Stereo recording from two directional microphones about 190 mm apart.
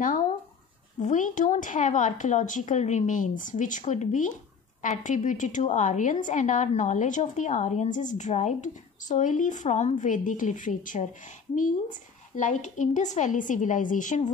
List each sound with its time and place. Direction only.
0.9 s a woman's voice: 40° left (ahead or behind)